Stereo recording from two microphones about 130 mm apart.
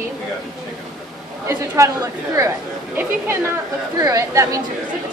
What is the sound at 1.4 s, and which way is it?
A woman's voice, 25° right (ahead or behind).